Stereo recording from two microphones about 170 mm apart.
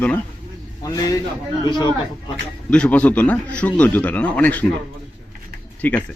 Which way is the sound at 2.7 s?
5° left (ahead or behind).